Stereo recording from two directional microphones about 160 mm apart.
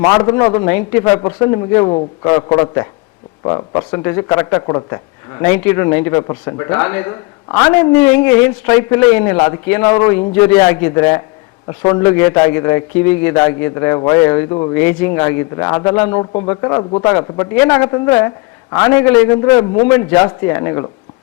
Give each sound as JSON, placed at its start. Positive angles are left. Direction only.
{"t": 0.0, "sound": "speech", "side_deg": 20}